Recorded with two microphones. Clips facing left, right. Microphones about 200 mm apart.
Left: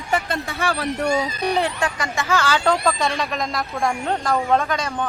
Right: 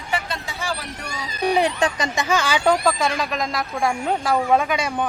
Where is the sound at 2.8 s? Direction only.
Centre (ahead or behind).